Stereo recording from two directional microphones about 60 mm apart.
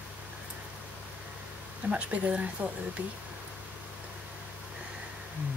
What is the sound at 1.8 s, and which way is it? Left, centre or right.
Speech, right.